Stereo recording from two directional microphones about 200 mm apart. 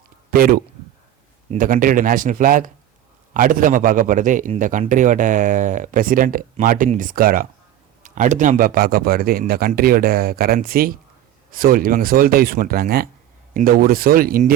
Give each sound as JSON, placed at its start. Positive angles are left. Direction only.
{"t": 0.3, "sound": "a man's voice", "side_deg": -45}